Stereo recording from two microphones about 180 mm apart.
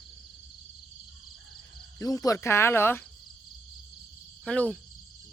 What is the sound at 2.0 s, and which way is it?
Speech, 20° left (ahead or behind).